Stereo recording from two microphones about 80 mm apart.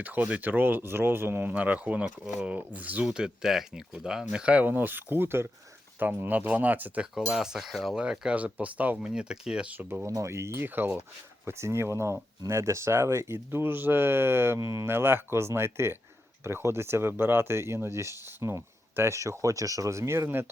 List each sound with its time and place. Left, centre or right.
0.0 s speech: right
3.1 s speech: centre
7.3 s cutlery: centre
8.0 s speech: centre
9.7 s speech: right
10.1 s speech: right